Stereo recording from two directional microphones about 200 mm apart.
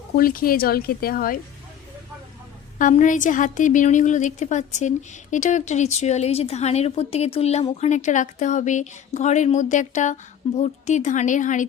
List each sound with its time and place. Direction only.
0.2 s speech: 45° left (ahead or behind)
2.7 s a woman's voice: 40° left (ahead or behind)